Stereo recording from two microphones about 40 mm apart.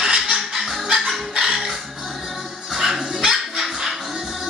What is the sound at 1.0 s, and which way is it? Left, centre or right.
Music, right.